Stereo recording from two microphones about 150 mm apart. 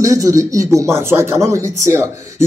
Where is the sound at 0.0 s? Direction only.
20° right (ahead or behind).